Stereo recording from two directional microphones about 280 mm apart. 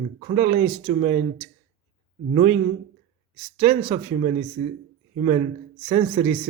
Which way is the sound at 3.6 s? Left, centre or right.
Centre.